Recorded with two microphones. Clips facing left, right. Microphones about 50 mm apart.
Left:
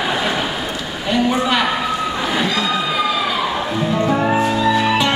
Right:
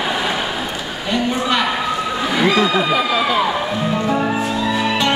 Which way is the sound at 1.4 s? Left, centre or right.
Centre.